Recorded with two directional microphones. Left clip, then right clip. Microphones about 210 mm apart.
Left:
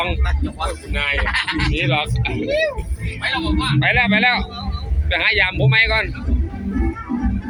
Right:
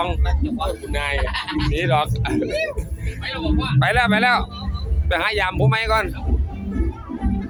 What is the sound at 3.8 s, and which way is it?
Speech, 20° right (ahead or behind).